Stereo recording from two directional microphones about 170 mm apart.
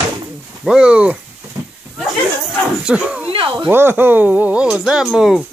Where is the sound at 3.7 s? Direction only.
15° right (ahead or behind).